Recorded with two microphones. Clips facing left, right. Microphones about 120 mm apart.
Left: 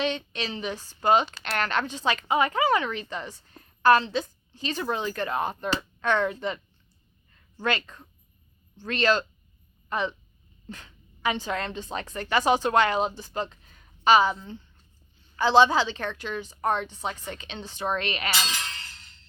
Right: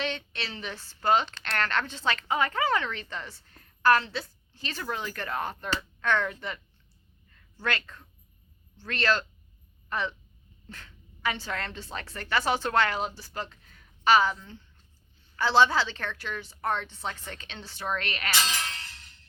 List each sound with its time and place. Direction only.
0.0 s a woman's voice: 15° left (ahead or behind)